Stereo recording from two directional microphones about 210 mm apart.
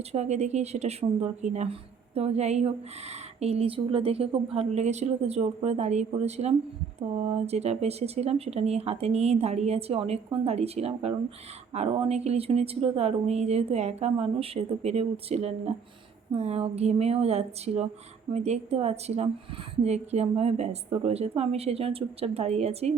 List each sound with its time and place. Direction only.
0.1 s speech: 30° right (ahead or behind)